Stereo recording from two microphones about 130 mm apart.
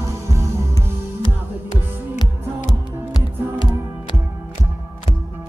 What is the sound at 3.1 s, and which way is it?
Music, 35° left (ahead or behind).